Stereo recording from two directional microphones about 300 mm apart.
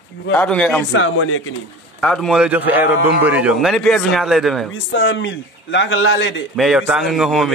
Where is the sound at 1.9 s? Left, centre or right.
Centre.